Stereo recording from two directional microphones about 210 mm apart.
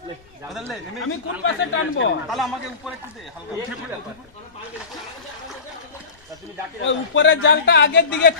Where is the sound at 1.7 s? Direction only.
65° left (ahead or behind).